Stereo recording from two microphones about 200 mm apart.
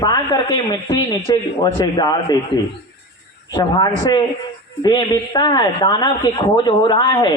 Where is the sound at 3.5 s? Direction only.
20° left (ahead or behind).